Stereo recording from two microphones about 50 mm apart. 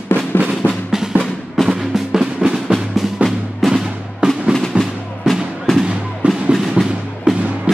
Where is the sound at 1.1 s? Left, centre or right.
Right.